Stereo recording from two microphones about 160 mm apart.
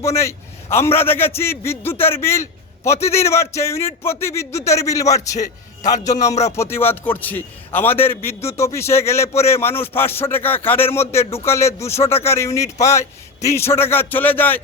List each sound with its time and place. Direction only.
0.2 s a man's voice: 15° left (ahead or behind)